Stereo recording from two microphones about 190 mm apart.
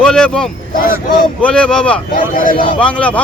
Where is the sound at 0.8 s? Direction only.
50° left (ahead or behind).